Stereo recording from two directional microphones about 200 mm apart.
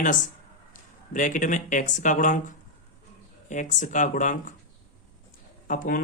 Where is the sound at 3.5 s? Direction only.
40° left (ahead or behind).